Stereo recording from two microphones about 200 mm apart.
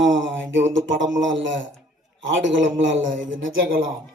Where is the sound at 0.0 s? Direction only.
65° right (ahead or behind).